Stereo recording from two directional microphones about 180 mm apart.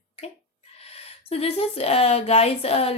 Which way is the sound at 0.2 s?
35° left (ahead or behind).